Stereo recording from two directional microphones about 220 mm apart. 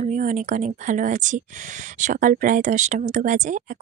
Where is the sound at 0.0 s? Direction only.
35° right (ahead or behind).